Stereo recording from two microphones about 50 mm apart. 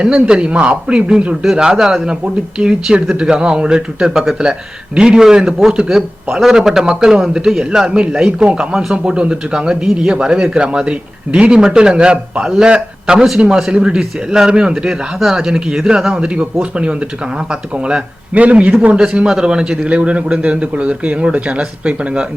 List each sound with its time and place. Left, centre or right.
0.0 s speech: centre
16.3 s speech: right
19.9 s speech: right